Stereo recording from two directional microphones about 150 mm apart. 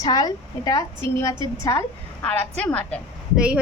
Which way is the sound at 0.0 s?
25° left (ahead or behind).